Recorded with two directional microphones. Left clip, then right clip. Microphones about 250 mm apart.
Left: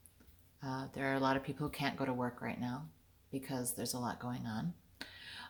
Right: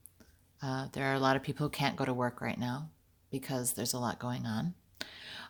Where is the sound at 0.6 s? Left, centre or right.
Right.